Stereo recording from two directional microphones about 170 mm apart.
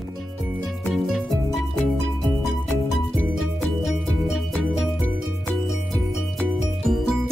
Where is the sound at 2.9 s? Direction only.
Centre (ahead or behind).